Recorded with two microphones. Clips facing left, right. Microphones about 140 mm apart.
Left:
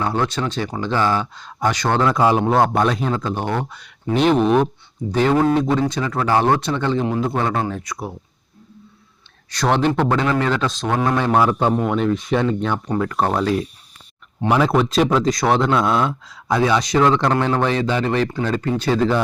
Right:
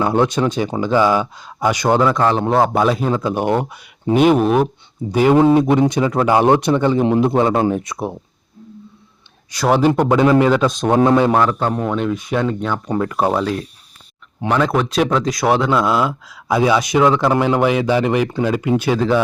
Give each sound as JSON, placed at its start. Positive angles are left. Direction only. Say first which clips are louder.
{"t": 0.0, "sound": "speech", "louder": "right 5 dB", "side_deg": -15}
{"t": 2.1, "sound": "a man's voice", "louder": "even", "side_deg": 10}
{"t": 2.4, "sound": "speech", "louder": "right 1 dB", "side_deg": -5}
{"t": 7.0, "sound": "a man's voice", "louder": "right 6 dB", "side_deg": -25}
{"t": 9.5, "sound": "speech", "louder": "right 3 dB", "side_deg": -5}
{"t": 10.8, "sound": "a man's voice", "louder": "right 6 dB", "side_deg": -25}
{"t": 11.3, "sound": "a man's voice", "louder": "even", "side_deg": 5}